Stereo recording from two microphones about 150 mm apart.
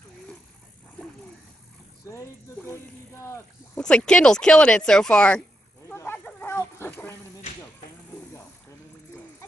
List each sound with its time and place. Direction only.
2.0 s a sound: 20° left (ahead or behind)
3.3 s speech: 10° left (ahead or behind)
5.9 s snake: 15° left (ahead or behind)
6.1 s dog: 10° left (ahead or behind)